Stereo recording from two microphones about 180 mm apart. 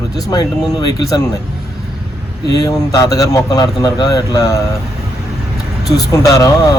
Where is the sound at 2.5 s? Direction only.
20° left (ahead or behind).